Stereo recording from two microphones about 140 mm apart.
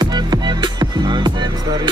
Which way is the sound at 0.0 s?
30° right (ahead or behind).